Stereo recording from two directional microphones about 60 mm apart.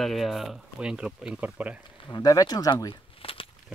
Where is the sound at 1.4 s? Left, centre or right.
Right.